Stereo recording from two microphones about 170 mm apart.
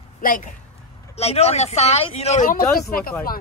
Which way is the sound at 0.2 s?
55° left (ahead or behind).